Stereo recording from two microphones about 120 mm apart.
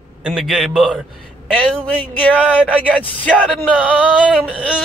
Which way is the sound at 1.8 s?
10° left (ahead or behind).